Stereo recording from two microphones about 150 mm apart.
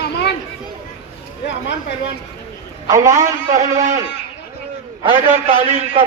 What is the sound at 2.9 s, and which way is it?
Speech, 20° right (ahead or behind).